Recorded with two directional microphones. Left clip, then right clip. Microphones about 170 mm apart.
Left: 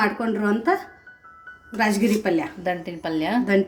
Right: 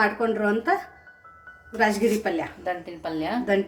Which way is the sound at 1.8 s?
50° left (ahead or behind).